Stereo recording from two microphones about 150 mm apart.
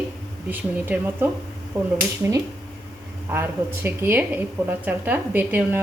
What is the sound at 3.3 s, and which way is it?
Speech, 15° right (ahead or behind).